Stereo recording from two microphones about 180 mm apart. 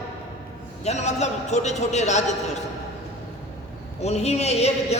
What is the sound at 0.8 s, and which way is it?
A woman's voice, 40° left (ahead or behind).